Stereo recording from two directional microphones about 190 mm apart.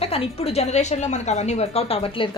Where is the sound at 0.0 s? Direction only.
30° left (ahead or behind).